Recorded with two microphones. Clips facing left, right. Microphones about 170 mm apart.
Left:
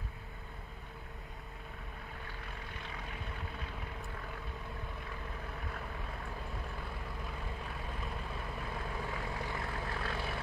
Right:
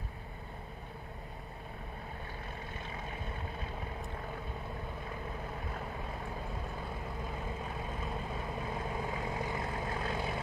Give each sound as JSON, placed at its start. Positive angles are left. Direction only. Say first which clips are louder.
{"t": 8.5, "sound": "vehicle", "louder": "right 3 dB", "side_deg": -20}